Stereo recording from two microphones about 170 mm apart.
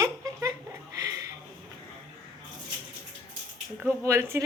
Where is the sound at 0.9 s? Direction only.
20° right (ahead or behind).